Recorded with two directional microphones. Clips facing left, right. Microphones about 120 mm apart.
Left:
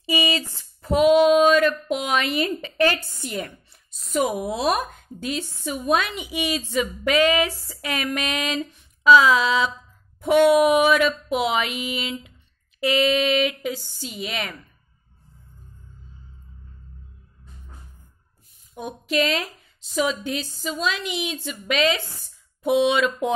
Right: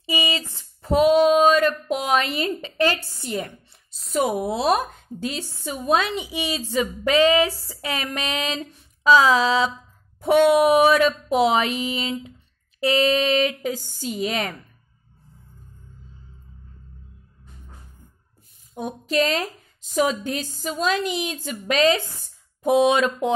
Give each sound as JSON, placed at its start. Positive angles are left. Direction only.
{"t": 0.0, "sound": "a sound", "side_deg": -20}
{"t": 10.2, "sound": "a woman's voice", "side_deg": -30}
{"t": 18.8, "sound": "a woman's voice", "side_deg": -35}